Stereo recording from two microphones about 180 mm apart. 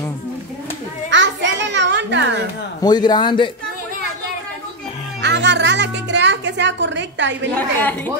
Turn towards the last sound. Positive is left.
turn(degrees=10)  # may be behind; listen again after turning